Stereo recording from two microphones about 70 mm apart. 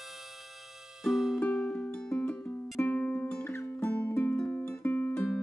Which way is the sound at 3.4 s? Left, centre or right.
Left.